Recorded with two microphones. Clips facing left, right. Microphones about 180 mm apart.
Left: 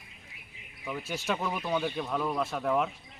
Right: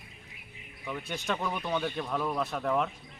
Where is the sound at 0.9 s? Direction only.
5° left (ahead or behind).